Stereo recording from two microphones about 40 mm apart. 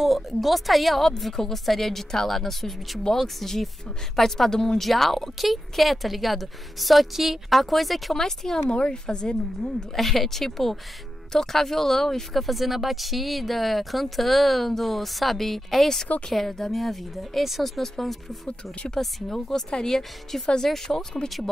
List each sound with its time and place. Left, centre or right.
0.0 s speech: centre
4.5 s speech: centre
8.1 s speech: centre
8.5 s a woman's voice: left
9.9 s speech: centre
16.7 s speech: centre